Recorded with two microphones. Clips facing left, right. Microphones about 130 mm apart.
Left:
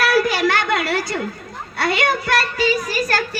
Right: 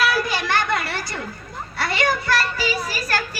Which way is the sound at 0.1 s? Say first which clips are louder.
Left 5 dB; 65° left (ahead or behind).